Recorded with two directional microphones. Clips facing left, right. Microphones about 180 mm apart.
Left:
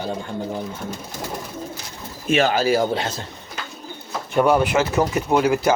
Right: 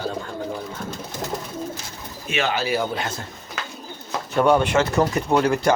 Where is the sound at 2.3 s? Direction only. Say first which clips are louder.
Left 5 dB; 40° left (ahead or behind).